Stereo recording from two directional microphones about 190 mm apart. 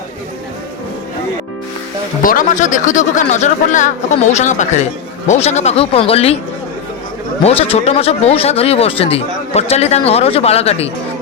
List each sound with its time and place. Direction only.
2.2 s speech: 45° left (ahead or behind)
7.4 s speech: 35° left (ahead or behind)